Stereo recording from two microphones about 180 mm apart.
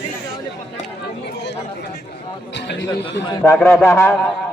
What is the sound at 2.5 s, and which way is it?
Speech, 75° left (ahead or behind).